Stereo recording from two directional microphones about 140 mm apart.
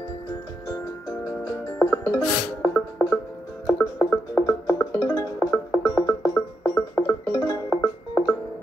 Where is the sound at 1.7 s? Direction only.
10° left (ahead or behind); by 7.6 s 25° left (ahead or behind).